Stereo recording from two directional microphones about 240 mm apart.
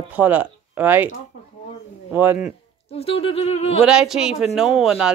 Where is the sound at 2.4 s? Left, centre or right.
Left.